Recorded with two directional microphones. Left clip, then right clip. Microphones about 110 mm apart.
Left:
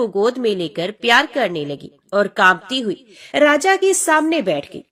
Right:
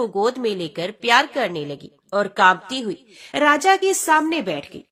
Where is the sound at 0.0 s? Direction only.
15° left (ahead or behind).